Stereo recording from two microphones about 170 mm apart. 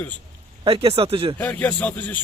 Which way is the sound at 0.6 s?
35° right (ahead or behind).